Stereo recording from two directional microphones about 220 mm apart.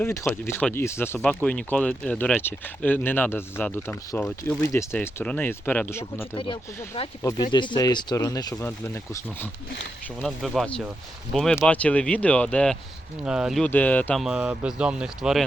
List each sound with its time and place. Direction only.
0.0 s speech: 10° left (ahead or behind)
6.3 s speech: 25° left (ahead or behind)
10.2 s speech: centre (ahead or behind)